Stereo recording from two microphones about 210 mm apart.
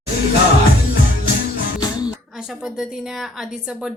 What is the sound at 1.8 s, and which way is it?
Music, 20° left (ahead or behind).